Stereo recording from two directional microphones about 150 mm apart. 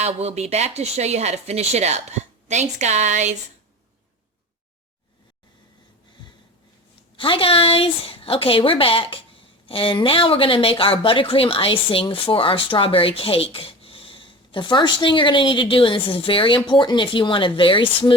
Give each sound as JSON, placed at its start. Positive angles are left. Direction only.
{"t": 0.0, "sound": "speech", "side_deg": -45}
{"t": 7.2, "sound": "a woman's voice", "side_deg": 35}